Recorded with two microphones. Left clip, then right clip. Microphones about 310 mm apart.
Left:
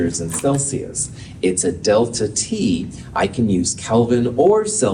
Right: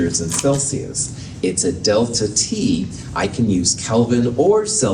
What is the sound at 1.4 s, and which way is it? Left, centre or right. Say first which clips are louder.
A man's voice: even; left.